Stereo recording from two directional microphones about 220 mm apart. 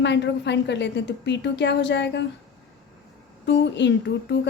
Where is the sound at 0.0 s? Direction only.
55° left (ahead or behind).